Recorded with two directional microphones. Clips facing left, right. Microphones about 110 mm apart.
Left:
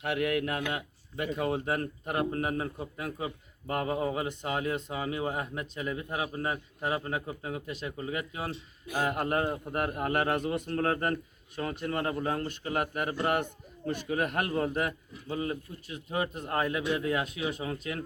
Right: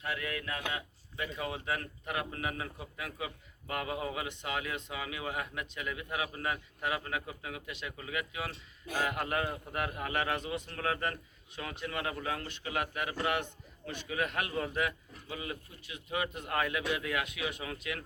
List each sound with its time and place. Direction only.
0.0 s a man's voice: 70° left (ahead or behind); by 18.0 s 30° left (ahead or behind)